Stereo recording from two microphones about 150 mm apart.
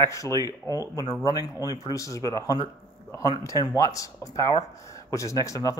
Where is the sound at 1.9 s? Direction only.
20° left (ahead or behind).